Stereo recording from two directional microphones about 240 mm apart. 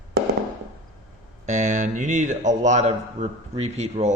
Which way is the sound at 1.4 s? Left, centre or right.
Right.